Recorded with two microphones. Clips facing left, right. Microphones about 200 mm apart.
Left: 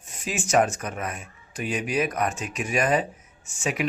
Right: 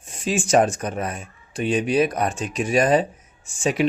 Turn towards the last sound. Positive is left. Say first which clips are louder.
# right 6 dB
turn(degrees=-30)  # may be behind; listen again after turning